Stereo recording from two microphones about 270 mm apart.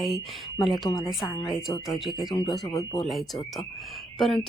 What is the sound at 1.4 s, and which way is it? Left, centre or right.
Speech, centre.